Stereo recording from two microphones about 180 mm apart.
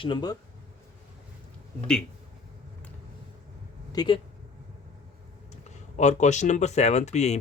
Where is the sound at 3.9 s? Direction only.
25° left (ahead or behind).